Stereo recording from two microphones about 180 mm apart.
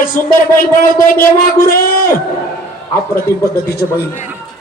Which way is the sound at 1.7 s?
55° left (ahead or behind).